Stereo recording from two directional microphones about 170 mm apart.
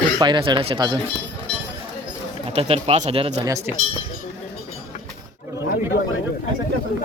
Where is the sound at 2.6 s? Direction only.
35° right (ahead or behind).